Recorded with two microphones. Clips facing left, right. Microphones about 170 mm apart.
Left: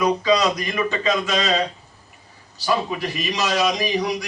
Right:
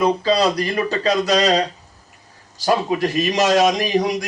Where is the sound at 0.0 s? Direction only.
30° right (ahead or behind).